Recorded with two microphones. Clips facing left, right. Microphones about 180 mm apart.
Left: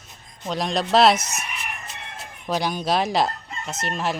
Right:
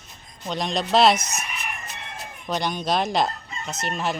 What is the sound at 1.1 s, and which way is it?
Speech, 25° left (ahead or behind).